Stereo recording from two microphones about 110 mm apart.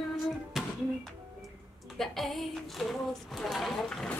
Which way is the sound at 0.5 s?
Centre (ahead or behind).